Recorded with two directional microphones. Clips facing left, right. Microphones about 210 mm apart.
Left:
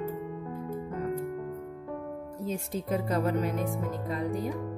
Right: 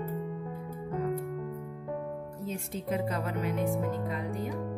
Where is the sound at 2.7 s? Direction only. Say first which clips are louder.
Left 1 dB; 40° left (ahead or behind).